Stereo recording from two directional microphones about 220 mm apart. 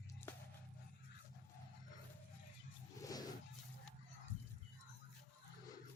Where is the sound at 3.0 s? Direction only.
15° left (ahead or behind).